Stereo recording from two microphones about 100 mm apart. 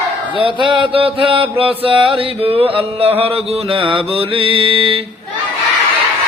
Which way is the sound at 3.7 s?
60° right (ahead or behind).